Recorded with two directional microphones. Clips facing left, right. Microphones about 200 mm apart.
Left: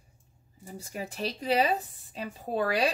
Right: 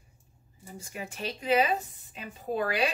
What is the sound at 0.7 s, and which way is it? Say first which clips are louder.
Speech: left 3 dB; 35° left (ahead or behind).